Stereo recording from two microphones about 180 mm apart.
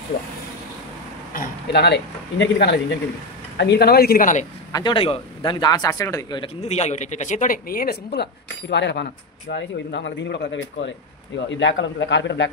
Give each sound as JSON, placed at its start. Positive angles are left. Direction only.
{"t": 1.3, "sound": "speech", "side_deg": 60}
{"t": 4.7, "sound": "a man's voice", "side_deg": 25}